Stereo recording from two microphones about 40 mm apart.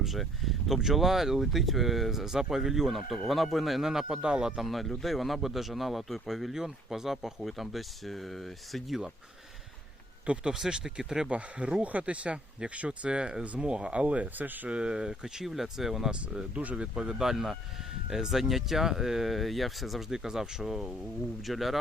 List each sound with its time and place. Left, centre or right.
0.0 s speech: centre
4.2 s speech: right
4.5 s a man's voice: centre
10.5 s speech: centre
11.3 s speech: right
14.0 s speech: right
14.7 s a man's voice: right; by 21.8 s centre